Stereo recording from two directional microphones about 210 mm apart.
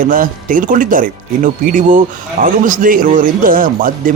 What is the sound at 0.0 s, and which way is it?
A man's voice, 40° right (ahead or behind).